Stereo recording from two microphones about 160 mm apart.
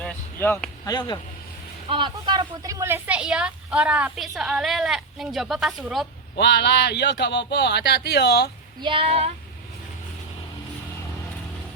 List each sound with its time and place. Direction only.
0.0 s a sound: 10° left (ahead or behind)
0.9 s speech: 25° left (ahead or behind)
1.9 s speech: 30° right (ahead or behind); by 6.1 s centre (ahead or behind)
6.3 s speech: 90° left
8.8 s speech: 35° right (ahead or behind)